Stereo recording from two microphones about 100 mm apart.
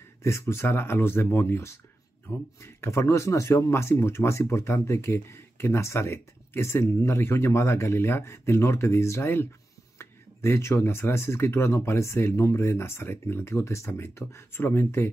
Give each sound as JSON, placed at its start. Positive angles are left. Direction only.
{"t": 0.2, "sound": "speech", "side_deg": 25}